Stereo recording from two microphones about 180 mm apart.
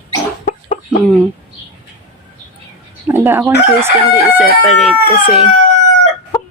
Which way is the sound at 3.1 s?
10° right (ahead or behind).